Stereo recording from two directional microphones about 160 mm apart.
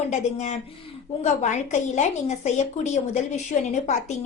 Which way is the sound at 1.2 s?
50° left (ahead or behind).